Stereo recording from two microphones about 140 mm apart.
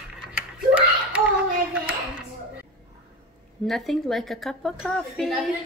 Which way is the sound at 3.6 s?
Centre (ahead or behind).